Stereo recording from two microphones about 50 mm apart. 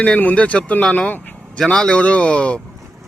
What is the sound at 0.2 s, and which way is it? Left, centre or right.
Speech, left.